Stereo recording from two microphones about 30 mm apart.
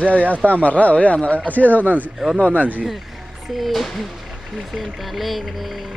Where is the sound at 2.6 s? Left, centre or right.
Right.